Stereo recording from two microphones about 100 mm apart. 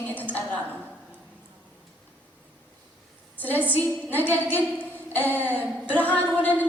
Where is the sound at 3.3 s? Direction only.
15° left (ahead or behind).